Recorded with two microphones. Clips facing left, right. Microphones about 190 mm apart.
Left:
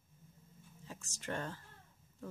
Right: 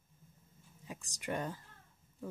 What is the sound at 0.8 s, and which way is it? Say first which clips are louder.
Speech: right 4 dB; 15° right (ahead or behind).